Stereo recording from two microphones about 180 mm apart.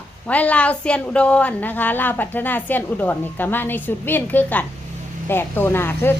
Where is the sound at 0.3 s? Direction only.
10° left (ahead or behind).